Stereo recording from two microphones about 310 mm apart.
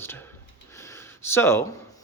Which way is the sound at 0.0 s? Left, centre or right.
Centre.